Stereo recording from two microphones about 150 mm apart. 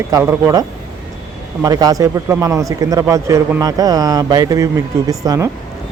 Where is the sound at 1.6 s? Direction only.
25° right (ahead or behind).